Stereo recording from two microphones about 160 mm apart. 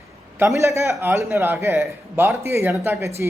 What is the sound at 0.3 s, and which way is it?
A man's voice, 20° right (ahead or behind).